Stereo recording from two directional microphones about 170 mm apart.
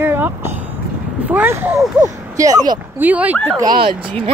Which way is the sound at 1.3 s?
10° right (ahead or behind).